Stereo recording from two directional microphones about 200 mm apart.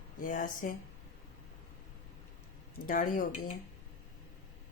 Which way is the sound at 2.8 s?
40° left (ahead or behind).